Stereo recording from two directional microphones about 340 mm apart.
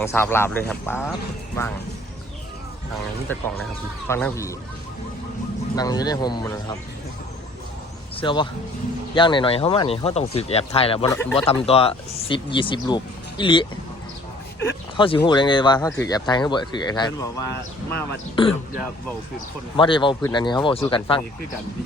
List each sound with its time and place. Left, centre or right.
0.0 s speech: centre
3.3 s speech: centre
5.7 s speech: centre
8.1 s speech: centre
19.7 s speech: centre